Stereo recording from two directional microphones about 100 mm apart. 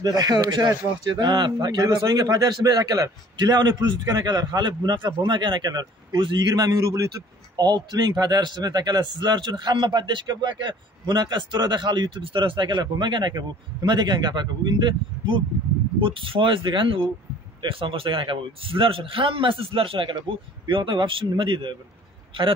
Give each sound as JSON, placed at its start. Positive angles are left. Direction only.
{"t": 0.0, "sound": "a man's voice", "side_deg": -40}